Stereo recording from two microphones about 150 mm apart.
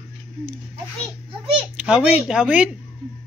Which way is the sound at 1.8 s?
5° right (ahead or behind).